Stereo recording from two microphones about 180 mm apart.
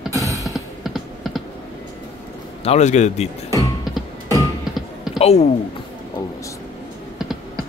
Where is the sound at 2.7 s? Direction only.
40° left (ahead or behind).